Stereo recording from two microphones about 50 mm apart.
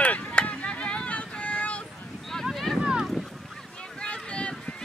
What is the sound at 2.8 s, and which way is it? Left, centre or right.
Boat, centre.